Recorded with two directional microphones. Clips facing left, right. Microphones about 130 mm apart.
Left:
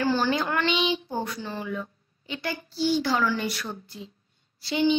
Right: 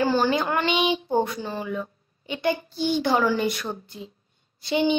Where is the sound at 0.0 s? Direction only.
15° right (ahead or behind).